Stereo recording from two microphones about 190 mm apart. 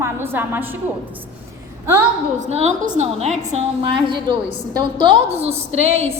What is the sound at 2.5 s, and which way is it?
A woman's voice, 35° right (ahead or behind).